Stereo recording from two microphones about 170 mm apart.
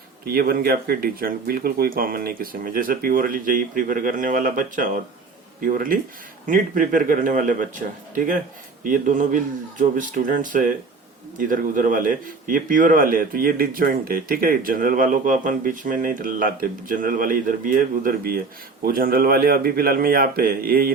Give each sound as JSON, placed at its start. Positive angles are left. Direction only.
{"t": 0.3, "sound": "a man's voice", "side_deg": -60}